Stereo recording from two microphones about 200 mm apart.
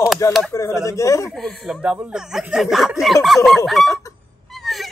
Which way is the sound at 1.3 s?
Centre (ahead or behind).